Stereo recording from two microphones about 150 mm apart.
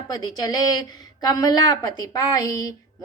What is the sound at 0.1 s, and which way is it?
A woman's voice, 25° left (ahead or behind).